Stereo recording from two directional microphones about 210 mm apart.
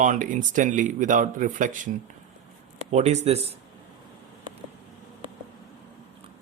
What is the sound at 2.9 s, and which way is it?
Speech, 30° right (ahead or behind).